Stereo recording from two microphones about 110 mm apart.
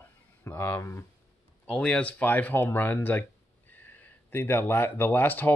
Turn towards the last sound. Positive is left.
turn(degrees=15)  # may be behind; listen again after turning